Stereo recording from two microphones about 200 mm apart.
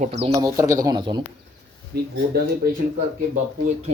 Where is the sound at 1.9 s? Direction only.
50° right (ahead or behind).